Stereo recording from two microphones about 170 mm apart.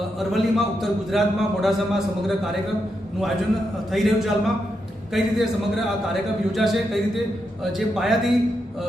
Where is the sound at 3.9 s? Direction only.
Centre (ahead or behind).